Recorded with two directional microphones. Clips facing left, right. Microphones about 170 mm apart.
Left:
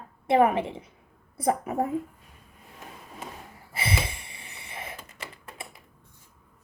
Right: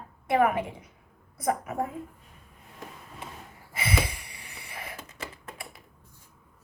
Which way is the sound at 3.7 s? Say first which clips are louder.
Right 1 dB; 30° left (ahead or behind).